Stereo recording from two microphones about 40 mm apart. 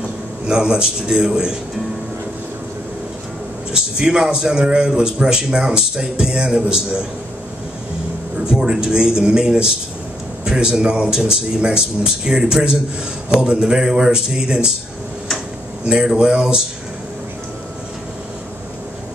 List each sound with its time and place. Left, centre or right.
0.5 s a man's voice: right
3.7 s a man's voice: centre
8.5 s a man's voice: centre
16.2 s a man's voice: right